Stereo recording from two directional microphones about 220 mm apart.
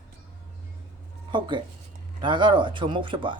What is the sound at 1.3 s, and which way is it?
Speech, 20° right (ahead or behind).